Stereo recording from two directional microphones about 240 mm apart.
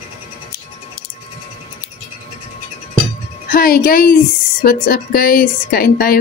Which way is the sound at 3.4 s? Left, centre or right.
Left.